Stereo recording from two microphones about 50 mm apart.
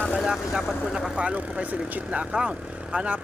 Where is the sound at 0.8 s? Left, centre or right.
Centre.